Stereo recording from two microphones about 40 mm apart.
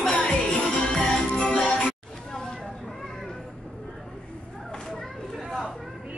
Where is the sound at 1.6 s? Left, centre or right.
Left.